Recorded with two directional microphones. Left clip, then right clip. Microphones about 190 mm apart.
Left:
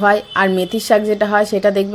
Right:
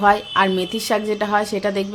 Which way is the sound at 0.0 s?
15° left (ahead or behind).